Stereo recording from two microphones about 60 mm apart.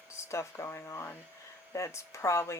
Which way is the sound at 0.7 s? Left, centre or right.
Left.